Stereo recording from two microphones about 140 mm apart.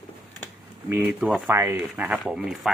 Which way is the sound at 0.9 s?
15° right (ahead or behind).